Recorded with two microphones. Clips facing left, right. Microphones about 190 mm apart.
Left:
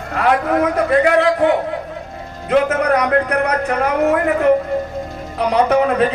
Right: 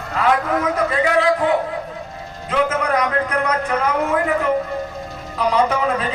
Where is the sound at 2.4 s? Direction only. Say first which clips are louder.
Left 5 dB; 65° left (ahead or behind).